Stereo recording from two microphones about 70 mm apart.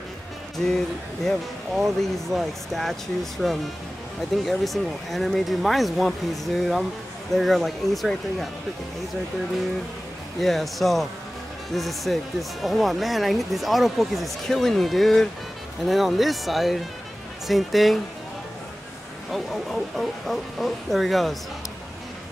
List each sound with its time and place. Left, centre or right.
0.7 s speech: centre
10.4 s speech: centre
19.3 s speech: centre